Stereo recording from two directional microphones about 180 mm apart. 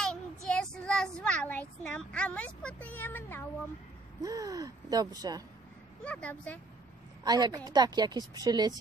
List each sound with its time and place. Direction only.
0.5 s child singing: 5° left (ahead or behind)
4.2 s a woman's voice: 20° right (ahead or behind)
6.0 s speech: 10° left (ahead or behind)
7.2 s a woman's voice: 20° right (ahead or behind)